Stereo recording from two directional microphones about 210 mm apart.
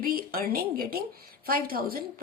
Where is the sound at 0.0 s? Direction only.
45° right (ahead or behind).